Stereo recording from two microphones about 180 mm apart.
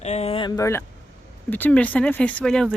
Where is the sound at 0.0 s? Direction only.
35° left (ahead or behind).